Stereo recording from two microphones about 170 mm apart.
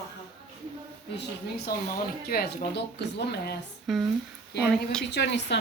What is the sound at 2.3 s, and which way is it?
Speech, 80° left.